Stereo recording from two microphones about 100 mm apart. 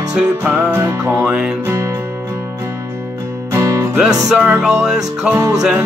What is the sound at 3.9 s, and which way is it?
Music, 5° right (ahead or behind).